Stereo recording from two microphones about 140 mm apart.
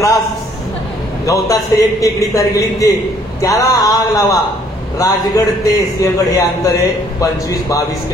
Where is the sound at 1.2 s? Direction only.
25° left (ahead or behind).